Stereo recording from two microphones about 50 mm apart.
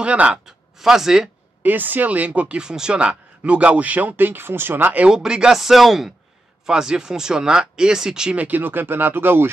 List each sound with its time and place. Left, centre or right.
0.0 s speech: right
0.5 s speech: centre
1.6 s speech: right
5.1 s speech: centre
5.6 s speech: centre
8.4 s speech: right